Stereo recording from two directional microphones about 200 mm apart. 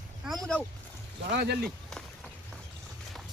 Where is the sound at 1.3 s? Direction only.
55° right (ahead or behind).